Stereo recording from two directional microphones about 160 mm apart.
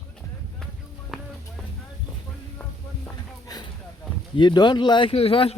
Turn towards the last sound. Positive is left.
turn(degrees=35)  # may be behind; listen again after turning